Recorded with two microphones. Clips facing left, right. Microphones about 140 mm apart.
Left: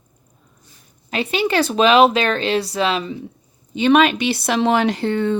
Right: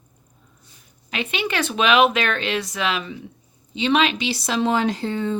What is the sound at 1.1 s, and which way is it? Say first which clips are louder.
Speech: left 6 dB; 35° left (ahead or behind).